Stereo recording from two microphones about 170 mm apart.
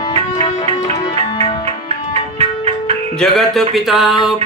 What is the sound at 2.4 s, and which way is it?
Music, 35° right (ahead or behind).